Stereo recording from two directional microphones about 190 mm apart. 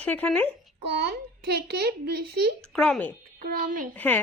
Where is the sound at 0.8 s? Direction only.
60° right (ahead or behind).